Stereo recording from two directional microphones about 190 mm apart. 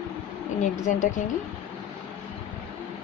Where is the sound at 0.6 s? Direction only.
40° left (ahead or behind).